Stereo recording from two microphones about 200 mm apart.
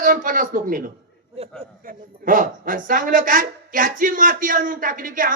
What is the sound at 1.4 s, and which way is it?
Speech, 30° right (ahead or behind).